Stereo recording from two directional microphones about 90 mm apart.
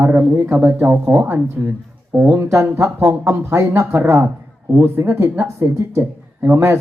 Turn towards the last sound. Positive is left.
turn(degrees=-25)  # may be behind; listen again after turning